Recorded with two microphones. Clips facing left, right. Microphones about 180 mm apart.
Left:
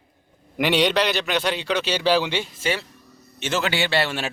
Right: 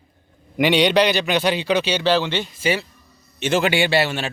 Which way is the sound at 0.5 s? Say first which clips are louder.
Right 4 dB; centre (ahead or behind).